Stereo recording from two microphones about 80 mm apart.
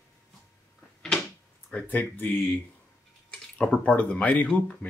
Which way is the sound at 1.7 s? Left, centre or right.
Left.